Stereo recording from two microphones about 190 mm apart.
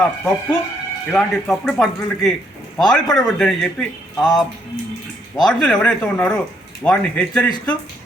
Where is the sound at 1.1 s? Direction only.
Centre (ahead or behind).